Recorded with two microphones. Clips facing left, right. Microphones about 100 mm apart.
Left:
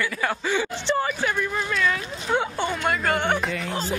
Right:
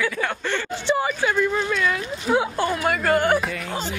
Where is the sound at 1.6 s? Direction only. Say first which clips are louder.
Right 2 dB; 5° right (ahead or behind).